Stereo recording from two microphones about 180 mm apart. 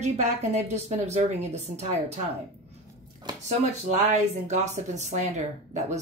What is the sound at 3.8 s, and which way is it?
A woman's voice, 40° right (ahead or behind).